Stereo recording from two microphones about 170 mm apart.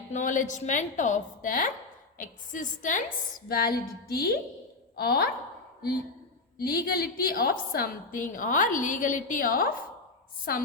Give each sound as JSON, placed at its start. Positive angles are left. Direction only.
{"t": 0.1, "sound": "a woman's voice", "side_deg": 45}
{"t": 3.5, "sound": "a woman's voice", "side_deg": 60}
{"t": 6.6, "sound": "a woman's voice", "side_deg": 65}